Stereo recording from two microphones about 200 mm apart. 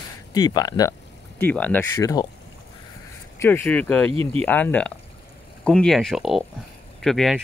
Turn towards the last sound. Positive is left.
turn(degrees=0)  # may be behind; listen again after turning